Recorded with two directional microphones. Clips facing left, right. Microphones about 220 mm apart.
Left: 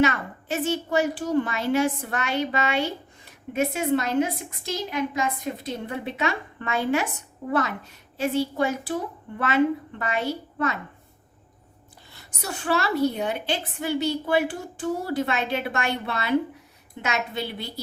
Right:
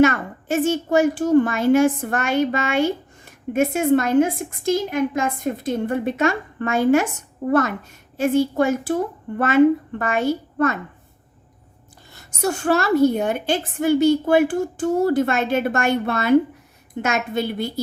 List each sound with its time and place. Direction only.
0.0 s a woman's voice: 45° right (ahead or behind)
12.1 s a woman's voice: 45° right (ahead or behind)